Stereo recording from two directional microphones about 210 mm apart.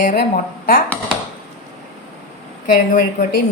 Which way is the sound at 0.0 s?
40° left (ahead or behind).